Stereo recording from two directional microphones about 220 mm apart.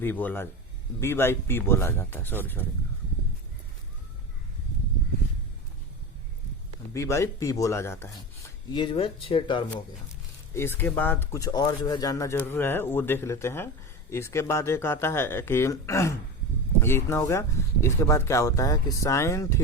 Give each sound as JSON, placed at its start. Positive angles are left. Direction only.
{"t": 0.0, "sound": "speech", "side_deg": 10}
{"t": 6.9, "sound": "speech", "side_deg": 15}
{"t": 10.5, "sound": "speech", "side_deg": 10}